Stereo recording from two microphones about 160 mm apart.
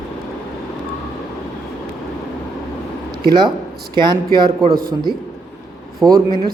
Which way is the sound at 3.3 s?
25° right (ahead or behind).